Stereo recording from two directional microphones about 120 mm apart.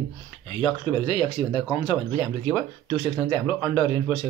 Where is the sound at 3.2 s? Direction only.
35° left (ahead or behind).